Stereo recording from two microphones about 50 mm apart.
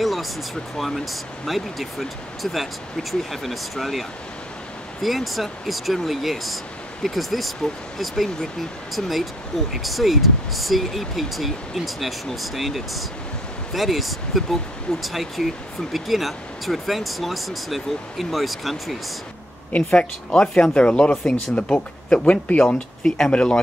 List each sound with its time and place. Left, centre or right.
0.0 s speech: centre
5.0 s speech: centre
20.0 s speech: centre
23.0 s speech: centre